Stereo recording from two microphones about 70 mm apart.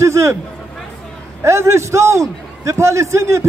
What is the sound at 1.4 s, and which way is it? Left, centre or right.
A man's voice, right.